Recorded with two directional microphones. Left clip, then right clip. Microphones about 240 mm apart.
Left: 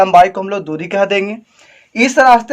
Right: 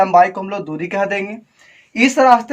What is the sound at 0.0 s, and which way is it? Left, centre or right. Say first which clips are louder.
Speech: left 4 dB; left.